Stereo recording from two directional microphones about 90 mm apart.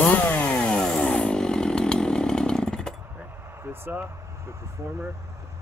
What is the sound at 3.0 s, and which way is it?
Vehicle, 25° right (ahead or behind).